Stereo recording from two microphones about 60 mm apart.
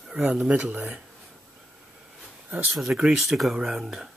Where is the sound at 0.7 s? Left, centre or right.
Right.